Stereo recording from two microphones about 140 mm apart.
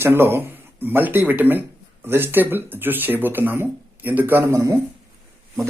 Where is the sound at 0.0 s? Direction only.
15° right (ahead or behind).